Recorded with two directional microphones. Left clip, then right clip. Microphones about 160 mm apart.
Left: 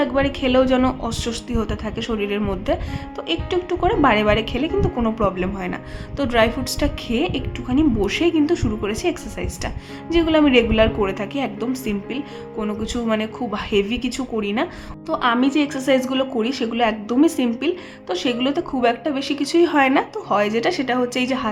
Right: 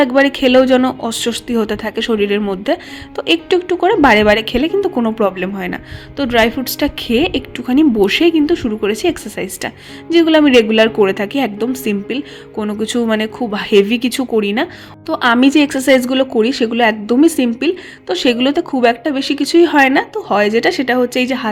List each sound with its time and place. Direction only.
0.0 s a woman's voice: 35° right (ahead or behind)